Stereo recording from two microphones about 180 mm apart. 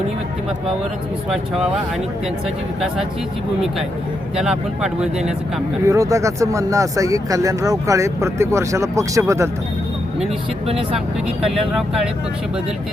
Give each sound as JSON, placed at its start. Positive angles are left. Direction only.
{"t": 1.3, "sound": "speech", "side_deg": 0}
{"t": 4.4, "sound": "speech", "side_deg": -5}
{"t": 5.9, "sound": "speech", "side_deg": -15}
{"t": 11.4, "sound": "speech", "side_deg": 0}